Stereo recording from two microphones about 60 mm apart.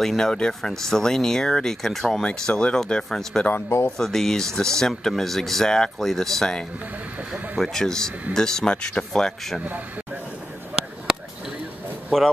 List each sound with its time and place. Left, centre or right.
0.0 s speech: centre
3.6 s speech: left
4.0 s speech: centre
12.1 s a man's voice: centre